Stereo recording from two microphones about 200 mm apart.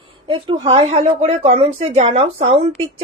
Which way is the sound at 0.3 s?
25° right (ahead or behind).